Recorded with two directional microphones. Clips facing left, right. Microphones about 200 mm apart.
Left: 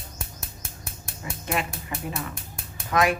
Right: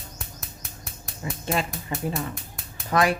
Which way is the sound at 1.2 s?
30° right (ahead or behind).